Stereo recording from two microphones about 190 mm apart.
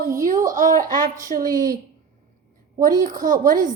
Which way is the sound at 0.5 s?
45° right (ahead or behind).